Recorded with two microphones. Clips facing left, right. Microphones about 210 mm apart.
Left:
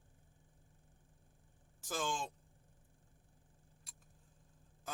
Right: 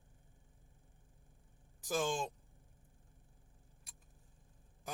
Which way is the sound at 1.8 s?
15° right (ahead or behind).